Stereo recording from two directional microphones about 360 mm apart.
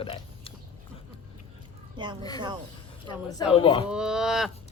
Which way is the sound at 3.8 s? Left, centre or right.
Centre.